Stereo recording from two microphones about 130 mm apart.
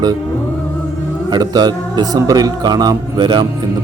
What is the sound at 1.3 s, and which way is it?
Speech, 35° right (ahead or behind).